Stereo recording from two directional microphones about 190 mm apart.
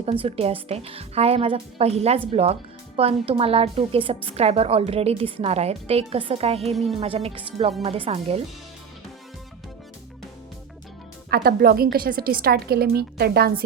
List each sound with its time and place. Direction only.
0.0 s speech: 30° right (ahead or behind)
11.3 s a woman's voice: 50° right (ahead or behind)